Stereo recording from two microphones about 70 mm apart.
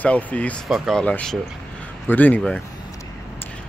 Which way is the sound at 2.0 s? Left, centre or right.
Left.